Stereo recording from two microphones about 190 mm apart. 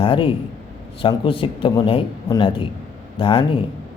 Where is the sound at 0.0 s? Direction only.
30° left (ahead or behind).